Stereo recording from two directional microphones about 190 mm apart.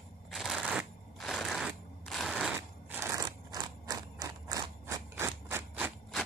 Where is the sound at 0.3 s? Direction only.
Centre (ahead or behind).